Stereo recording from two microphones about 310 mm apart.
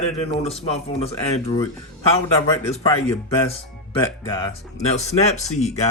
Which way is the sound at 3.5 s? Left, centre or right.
Centre.